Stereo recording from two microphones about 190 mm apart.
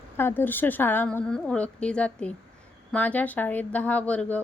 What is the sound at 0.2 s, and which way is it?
A woman's voice, 10° left (ahead or behind).